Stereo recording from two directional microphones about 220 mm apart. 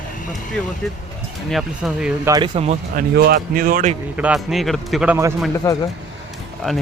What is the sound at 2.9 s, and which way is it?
Speech, 40° right (ahead or behind).